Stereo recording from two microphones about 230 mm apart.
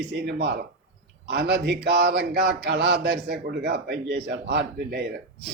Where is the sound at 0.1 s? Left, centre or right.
Right.